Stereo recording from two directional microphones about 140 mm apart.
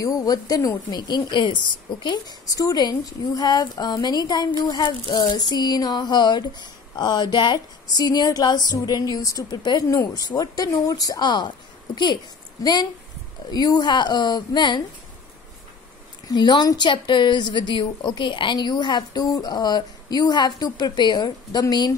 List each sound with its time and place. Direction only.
0.0 s speech: 25° left (ahead or behind)
13.5 s a woman's voice: 30° left (ahead or behind)
16.3 s a woman's voice: 30° left (ahead or behind)